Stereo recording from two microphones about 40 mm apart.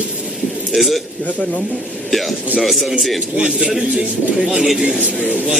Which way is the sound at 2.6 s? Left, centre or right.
Centre.